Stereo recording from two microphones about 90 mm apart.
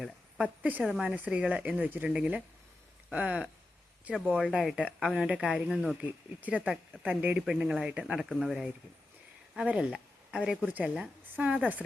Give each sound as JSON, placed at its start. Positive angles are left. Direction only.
{"t": 0.6, "sound": "speech", "side_deg": -15}
{"t": 4.5, "sound": "speech", "side_deg": -5}
{"t": 6.0, "sound": "speech", "side_deg": -15}
{"t": 7.4, "sound": "speech", "side_deg": -5}
{"t": 9.6, "sound": "speech", "side_deg": -10}